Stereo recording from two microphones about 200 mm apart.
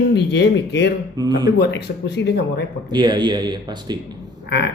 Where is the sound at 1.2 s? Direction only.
20° right (ahead or behind).